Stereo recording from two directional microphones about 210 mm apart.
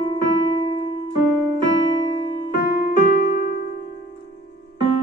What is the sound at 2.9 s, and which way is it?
Music, 40° left (ahead or behind).